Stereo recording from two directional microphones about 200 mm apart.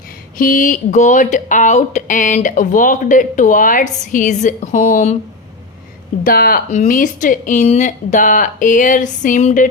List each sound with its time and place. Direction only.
0.3 s speech: 45° left (ahead or behind)
6.2 s speech: 45° left (ahead or behind)